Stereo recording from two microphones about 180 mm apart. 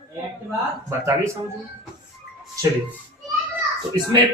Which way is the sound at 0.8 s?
15° right (ahead or behind).